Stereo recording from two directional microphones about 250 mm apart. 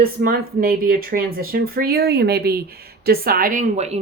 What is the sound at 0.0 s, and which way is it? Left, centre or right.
Speech, right.